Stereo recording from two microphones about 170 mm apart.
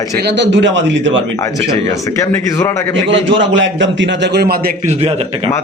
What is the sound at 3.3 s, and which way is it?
A man's voice, 90° right.